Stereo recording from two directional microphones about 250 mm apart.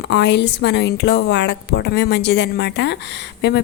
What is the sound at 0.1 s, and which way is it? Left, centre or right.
A woman's voice, left.